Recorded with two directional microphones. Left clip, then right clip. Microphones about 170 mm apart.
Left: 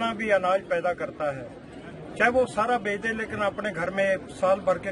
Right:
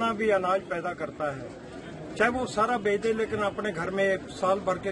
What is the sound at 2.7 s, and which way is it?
Speech, 20° left (ahead or behind).